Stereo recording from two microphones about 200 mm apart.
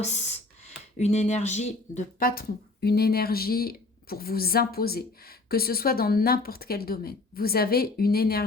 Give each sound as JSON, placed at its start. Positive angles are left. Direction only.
{"t": 0.0, "sound": "speech", "side_deg": 35}